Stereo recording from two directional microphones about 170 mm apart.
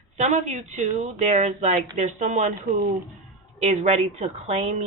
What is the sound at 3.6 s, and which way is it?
A woman's voice, 40° right (ahead or behind).